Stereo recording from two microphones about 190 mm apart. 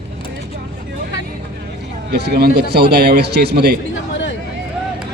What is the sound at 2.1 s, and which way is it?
A man's voice, 55° right (ahead or behind).